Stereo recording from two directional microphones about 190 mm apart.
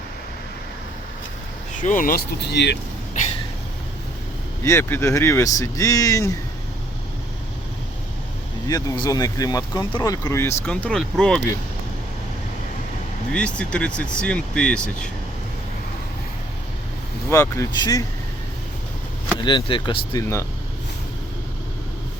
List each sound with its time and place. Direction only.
1.7 s speech: 45° left (ahead or behind); by 2.7 s 60° left (ahead or behind)
4.6 s speech: 15° left (ahead or behind)
8.6 s speech: 20° left (ahead or behind); by 11.4 s 5° left (ahead or behind)
13.3 s speech: 5° left (ahead or behind)
17.2 s speech: 15° left (ahead or behind)
19.4 s speech: 25° left (ahead or behind)